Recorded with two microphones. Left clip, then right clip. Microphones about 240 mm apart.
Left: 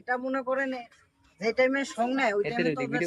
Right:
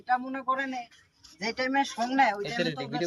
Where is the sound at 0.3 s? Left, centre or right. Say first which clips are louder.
Left 1 dB; centre.